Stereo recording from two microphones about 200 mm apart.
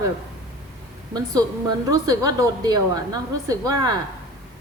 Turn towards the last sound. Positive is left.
turn(degrees=-20)  # may be behind; listen again after turning